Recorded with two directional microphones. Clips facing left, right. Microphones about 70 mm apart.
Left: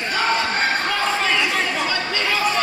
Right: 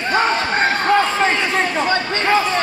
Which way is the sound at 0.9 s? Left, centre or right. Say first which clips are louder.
Right 5 dB; right.